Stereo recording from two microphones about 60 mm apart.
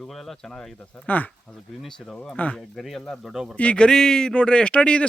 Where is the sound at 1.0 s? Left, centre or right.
Left.